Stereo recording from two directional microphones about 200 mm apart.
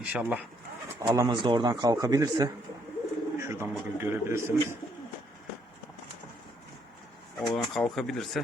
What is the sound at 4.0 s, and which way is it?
Speech, 10° right (ahead or behind).